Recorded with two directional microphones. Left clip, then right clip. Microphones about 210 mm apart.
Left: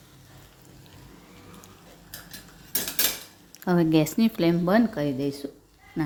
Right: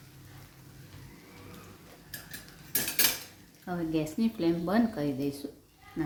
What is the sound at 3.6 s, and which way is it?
Speech, 45° left (ahead or behind).